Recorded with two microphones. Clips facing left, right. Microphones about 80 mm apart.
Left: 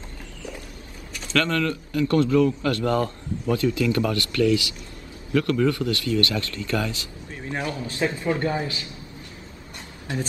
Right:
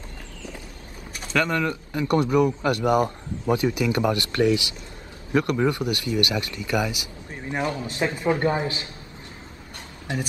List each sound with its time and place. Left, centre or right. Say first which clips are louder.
1.3 s speech: even; centre